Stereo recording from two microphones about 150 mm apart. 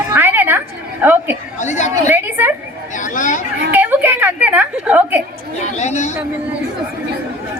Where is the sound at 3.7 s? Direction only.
15° right (ahead or behind).